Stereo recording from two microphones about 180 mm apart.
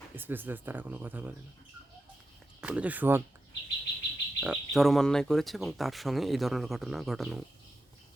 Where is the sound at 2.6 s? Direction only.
5° right (ahead or behind).